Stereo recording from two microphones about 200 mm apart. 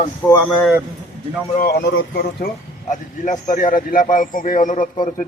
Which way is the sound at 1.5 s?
55° left (ahead or behind).